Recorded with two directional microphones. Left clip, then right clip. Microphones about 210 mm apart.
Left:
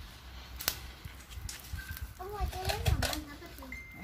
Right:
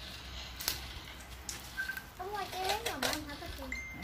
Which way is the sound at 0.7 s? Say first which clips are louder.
Left 1 dB; 15° left (ahead or behind).